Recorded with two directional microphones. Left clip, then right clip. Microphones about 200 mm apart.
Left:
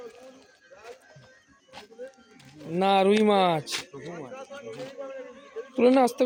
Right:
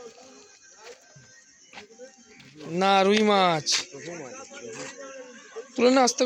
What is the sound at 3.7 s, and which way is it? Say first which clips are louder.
Speech: right 7 dB; 40° left (ahead or behind).